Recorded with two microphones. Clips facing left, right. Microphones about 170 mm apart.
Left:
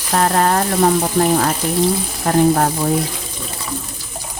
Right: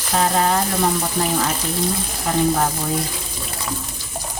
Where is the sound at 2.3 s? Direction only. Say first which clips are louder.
Left 5 dB; 55° left (ahead or behind).